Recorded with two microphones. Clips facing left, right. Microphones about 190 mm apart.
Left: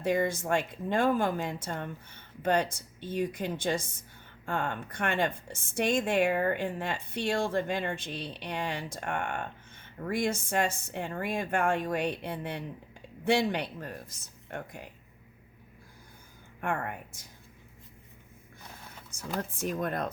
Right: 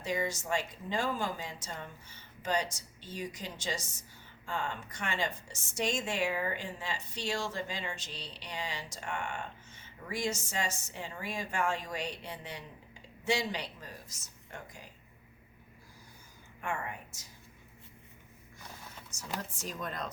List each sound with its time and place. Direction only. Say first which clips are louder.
0.0 s a woman's voice: left 6 dB; 55° left (ahead or behind)
16.6 s a woman's voice: left 5 dB; 55° left (ahead or behind)
19.1 s a woman's voice: left 6 dB; 55° left (ahead or behind)